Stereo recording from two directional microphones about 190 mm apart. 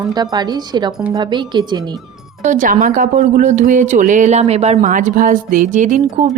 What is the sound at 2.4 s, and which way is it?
Speech, 45° right (ahead or behind).